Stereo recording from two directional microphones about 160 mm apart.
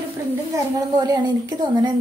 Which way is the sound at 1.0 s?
25° right (ahead or behind).